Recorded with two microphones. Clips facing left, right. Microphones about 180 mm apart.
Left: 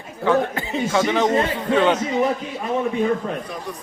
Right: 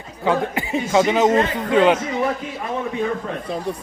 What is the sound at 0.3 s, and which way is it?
A man's voice, 15° right (ahead or behind).